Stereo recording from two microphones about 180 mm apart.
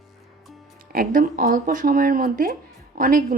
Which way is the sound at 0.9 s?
50° right (ahead or behind).